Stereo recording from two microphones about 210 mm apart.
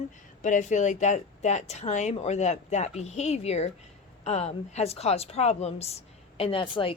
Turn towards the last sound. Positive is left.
turn(degrees=25)  # may be behind; listen again after turning